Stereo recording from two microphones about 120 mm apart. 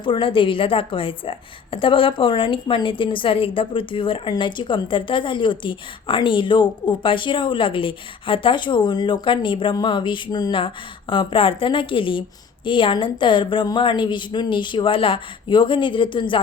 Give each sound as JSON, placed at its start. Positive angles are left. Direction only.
{"t": 0.0, "sound": "a woman's voice", "side_deg": 45}
{"t": 9.7, "sound": "a sound", "side_deg": 40}
{"t": 11.1, "sound": "a woman's voice", "side_deg": 45}